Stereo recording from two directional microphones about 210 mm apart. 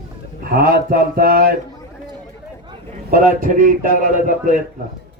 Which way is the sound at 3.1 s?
40° right (ahead or behind).